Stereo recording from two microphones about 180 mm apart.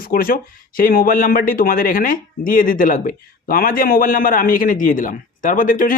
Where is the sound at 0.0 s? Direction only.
55° left (ahead or behind).